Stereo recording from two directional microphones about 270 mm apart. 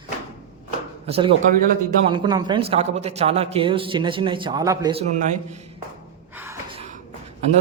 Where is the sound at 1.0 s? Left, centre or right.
Right.